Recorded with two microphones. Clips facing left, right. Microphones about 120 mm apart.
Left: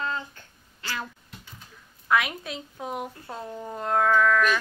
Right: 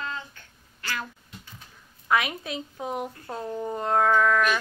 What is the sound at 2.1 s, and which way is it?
Speech, centre (ahead or behind).